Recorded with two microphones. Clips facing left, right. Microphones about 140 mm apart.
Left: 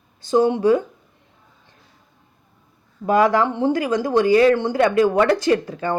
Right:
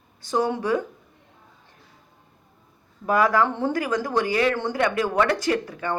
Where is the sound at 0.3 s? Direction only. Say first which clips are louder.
Left 7 dB; 25° left (ahead or behind).